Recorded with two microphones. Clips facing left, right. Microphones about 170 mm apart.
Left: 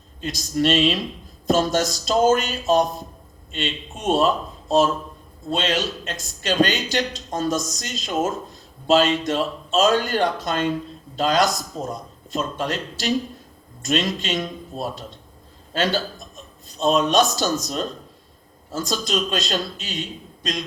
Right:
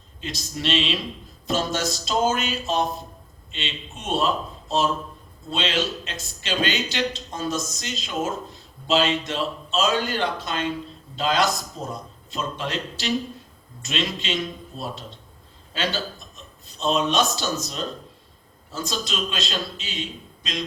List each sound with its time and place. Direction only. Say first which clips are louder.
0.2 s a man's voice: left 9 dB; 45° left (ahead or behind)
5.5 s a man's voice: left 2 dB; 45° left (ahead or behind)